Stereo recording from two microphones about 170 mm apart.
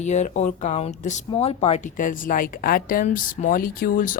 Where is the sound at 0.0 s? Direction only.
45° left (ahead or behind).